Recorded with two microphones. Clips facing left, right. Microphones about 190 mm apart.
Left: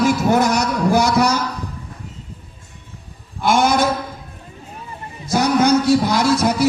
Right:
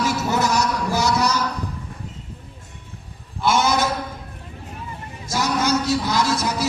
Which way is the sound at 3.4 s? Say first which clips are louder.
Left 3 dB; 55° left (ahead or behind).